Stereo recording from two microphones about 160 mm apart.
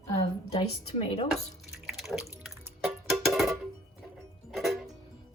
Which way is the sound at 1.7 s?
Centre (ahead or behind).